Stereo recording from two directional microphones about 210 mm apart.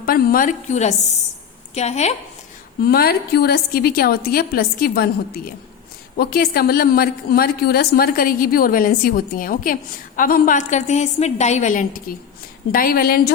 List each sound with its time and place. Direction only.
0.0 s a woman's voice: 45° left (ahead or behind)
2.8 s a woman's voice: 45° left (ahead or behind)